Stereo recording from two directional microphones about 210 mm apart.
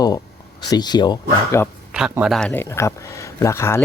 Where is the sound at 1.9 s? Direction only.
5° right (ahead or behind); by 3.8 s 10° left (ahead or behind).